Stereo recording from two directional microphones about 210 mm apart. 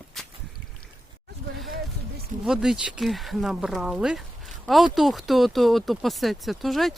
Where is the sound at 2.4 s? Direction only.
5° right (ahead or behind).